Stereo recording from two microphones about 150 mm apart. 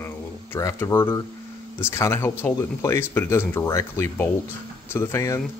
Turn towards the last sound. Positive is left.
turn(degrees=15)  # may be behind; listen again after turning